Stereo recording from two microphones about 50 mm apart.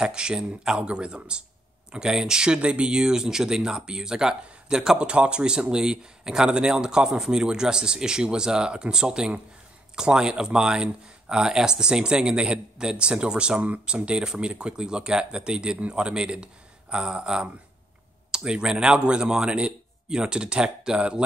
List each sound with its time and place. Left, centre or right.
0.0 s speech: centre